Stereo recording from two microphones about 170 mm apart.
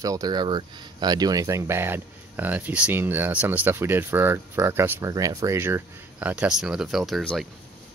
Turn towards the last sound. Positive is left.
turn(degrees=0)  # may be behind; listen again after turning